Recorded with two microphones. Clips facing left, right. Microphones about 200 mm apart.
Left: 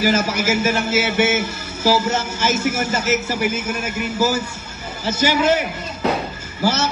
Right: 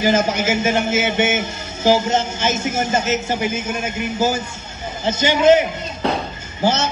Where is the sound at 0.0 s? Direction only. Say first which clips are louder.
Right 1 dB; 25° right (ahead or behind).